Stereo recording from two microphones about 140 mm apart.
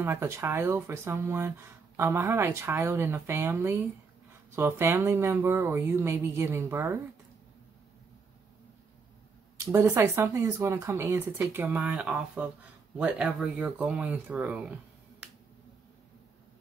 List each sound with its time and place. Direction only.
0.0 s speech: 20° right (ahead or behind)
9.7 s speech: 20° right (ahead or behind)